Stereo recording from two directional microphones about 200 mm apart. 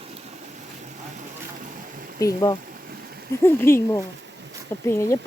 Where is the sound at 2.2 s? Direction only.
15° left (ahead or behind).